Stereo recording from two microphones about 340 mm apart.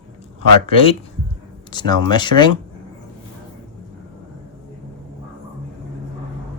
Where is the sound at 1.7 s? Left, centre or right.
Centre.